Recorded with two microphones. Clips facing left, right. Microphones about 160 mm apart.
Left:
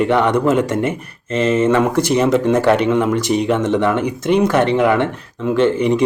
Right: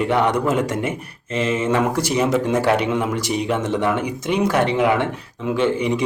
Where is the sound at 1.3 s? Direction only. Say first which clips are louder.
Left 6 dB; 50° left (ahead or behind).